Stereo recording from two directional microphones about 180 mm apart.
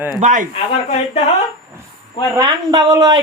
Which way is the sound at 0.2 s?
45° right (ahead or behind).